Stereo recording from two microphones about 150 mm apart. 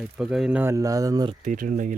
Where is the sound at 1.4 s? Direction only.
65° right (ahead or behind).